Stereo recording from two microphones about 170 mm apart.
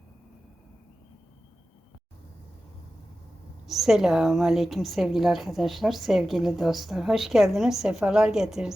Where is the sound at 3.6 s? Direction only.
Centre (ahead or behind).